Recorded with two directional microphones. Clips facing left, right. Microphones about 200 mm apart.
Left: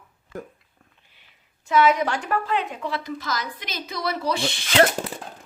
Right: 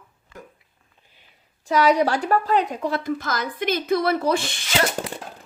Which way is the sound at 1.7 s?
35° right (ahead or behind).